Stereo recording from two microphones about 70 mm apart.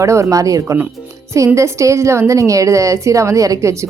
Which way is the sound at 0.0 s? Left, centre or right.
Right.